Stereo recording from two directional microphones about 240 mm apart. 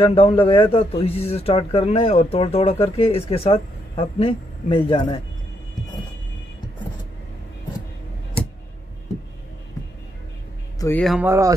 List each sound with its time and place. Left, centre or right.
0.0 s speech: left
10.8 s speech: centre
11.2 s speech: centre